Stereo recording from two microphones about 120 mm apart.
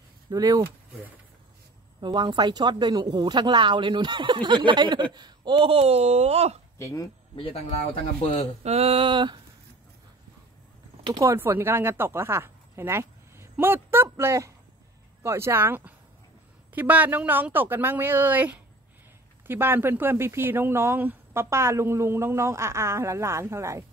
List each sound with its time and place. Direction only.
0.3 s speech: 30° right (ahead or behind)
2.0 s speech: 40° right (ahead or behind); by 6.6 s 60° right (ahead or behind)
6.8 s speech: 25° left (ahead or behind)
7.7 s speech: 55° left (ahead or behind)
8.6 s a sound: 60° right (ahead or behind); by 9.4 s 40° right (ahead or behind)
11.1 s speech: 20° right (ahead or behind)